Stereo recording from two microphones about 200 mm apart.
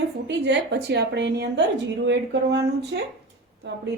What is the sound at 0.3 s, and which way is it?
A woman's voice, 60° right (ahead or behind).